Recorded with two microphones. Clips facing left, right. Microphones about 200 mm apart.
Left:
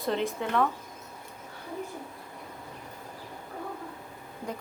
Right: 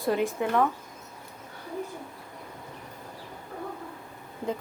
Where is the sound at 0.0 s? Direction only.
5° right (ahead or behind).